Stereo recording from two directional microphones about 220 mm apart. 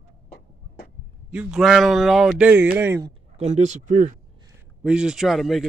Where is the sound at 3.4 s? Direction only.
30° right (ahead or behind).